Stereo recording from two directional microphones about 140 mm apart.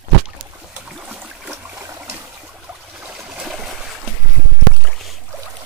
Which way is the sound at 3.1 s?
5° right (ahead or behind).